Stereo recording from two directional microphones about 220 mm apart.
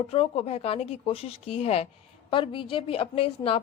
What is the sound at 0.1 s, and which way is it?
A woman's voice, 25° left (ahead or behind).